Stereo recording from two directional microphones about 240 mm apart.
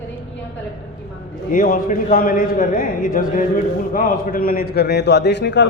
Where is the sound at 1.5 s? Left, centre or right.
Left.